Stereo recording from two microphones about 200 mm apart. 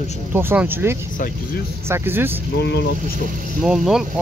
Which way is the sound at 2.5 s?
60° left (ahead or behind).